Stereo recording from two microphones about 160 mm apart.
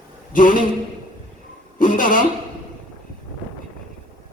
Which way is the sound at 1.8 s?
55° left (ahead or behind).